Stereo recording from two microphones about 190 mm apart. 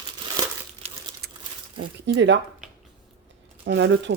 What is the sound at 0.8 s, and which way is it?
Crumpling, 35° right (ahead or behind).